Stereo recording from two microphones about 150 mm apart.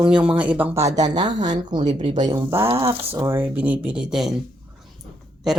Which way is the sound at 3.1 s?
15° right (ahead or behind).